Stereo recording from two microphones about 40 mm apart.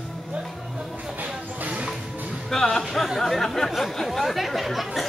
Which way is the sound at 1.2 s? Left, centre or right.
Right.